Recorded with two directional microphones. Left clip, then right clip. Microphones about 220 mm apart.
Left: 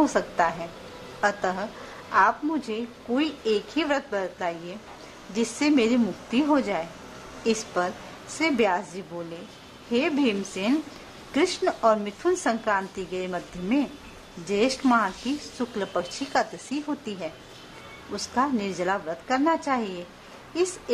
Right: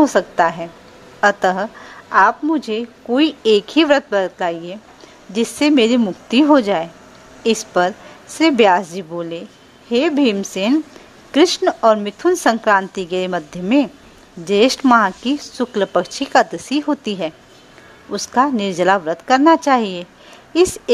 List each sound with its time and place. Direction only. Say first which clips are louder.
0.0 s a woman's voice: right 9 dB; 35° right (ahead or behind)